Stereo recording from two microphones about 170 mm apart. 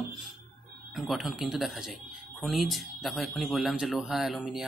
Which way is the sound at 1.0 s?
Centre (ahead or behind).